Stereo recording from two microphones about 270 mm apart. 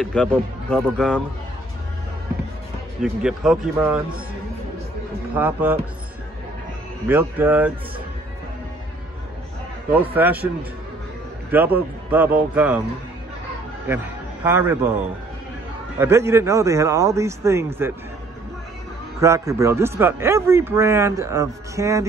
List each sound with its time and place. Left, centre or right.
0.0 s speech: centre
3.0 s speech: centre
5.4 s a man's voice: centre
7.1 s a man's voice: centre
10.1 s a man's voice: centre
11.5 s a man's voice: centre
13.8 s a man's voice: centre
16.0 s a man's voice: centre
19.1 s a man's voice: centre